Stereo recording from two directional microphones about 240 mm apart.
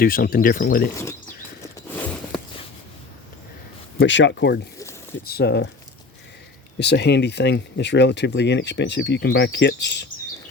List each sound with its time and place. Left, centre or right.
0.0 s speech: left
1.6 s a sound: centre
3.9 s speech: left
6.7 s speech: left